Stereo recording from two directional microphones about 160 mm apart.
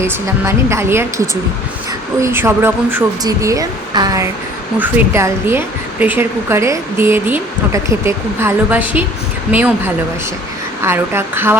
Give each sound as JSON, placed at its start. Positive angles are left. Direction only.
{"t": 0.0, "sound": "speech", "side_deg": -15}
{"t": 2.2, "sound": "speech", "side_deg": -15}